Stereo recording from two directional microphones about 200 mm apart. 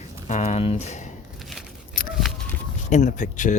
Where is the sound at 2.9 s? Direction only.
40° left (ahead or behind).